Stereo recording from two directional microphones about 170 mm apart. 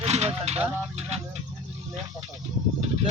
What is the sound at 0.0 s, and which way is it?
Speech, 40° right (ahead or behind).